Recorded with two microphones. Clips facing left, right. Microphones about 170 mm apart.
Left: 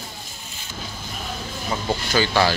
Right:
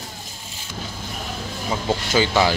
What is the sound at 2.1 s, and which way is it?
Speech, 20° right (ahead or behind).